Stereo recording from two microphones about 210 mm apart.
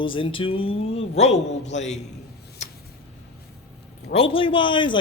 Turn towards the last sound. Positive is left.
turn(degrees=25)  # may be behind; listen again after turning